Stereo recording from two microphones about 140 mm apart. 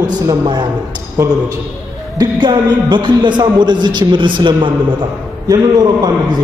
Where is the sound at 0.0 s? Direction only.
30° right (ahead or behind).